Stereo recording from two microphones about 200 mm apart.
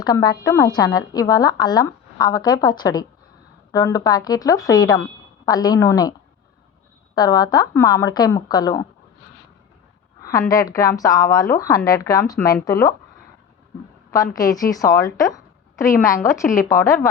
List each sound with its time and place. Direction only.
0.0 s a woman's voice: 20° left (ahead or behind)
7.2 s a woman's voice: 20° left (ahead or behind)
10.2 s a woman's voice: 15° left (ahead or behind)
14.3 s a woman's voice: 15° left (ahead or behind)